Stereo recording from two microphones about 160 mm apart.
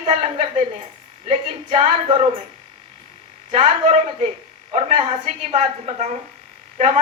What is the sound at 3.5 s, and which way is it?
A woman's voice, 45° right (ahead or behind).